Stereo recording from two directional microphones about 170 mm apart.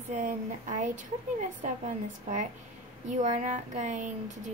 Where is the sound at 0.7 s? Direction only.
45° right (ahead or behind).